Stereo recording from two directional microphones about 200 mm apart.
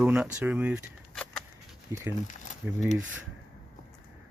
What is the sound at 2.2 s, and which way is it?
Speech, 40° left (ahead or behind).